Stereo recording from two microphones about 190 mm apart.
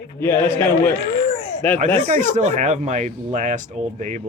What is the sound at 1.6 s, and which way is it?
Speech, 10° left (ahead or behind).